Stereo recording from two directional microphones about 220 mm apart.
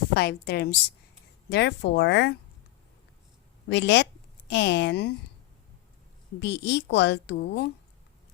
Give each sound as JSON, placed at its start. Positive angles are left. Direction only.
{"t": 0.1, "sound": "a woman's voice", "side_deg": 45}
{"t": 3.7, "sound": "a woman's voice", "side_deg": 50}
{"t": 6.4, "sound": "a woman's voice", "side_deg": 50}